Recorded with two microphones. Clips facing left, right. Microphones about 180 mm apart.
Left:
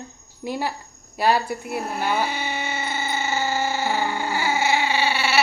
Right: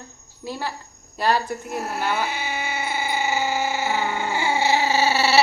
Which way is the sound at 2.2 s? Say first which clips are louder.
Left 1 dB; 5° right (ahead or behind).